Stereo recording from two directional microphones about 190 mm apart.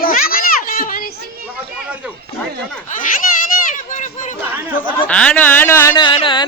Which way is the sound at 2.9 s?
45° left (ahead or behind).